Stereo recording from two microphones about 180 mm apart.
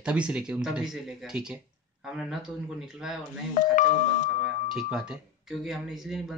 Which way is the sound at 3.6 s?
45° left (ahead or behind).